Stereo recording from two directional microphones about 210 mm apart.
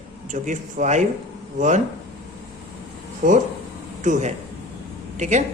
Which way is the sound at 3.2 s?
40° right (ahead or behind).